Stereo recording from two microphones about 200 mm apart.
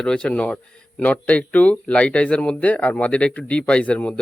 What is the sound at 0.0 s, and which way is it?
Speech, 5° left (ahead or behind).